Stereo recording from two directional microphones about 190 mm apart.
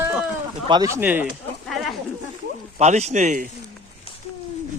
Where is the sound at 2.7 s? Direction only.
35° right (ahead or behind).